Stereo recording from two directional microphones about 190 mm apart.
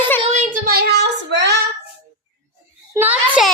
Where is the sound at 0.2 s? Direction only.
35° right (ahead or behind).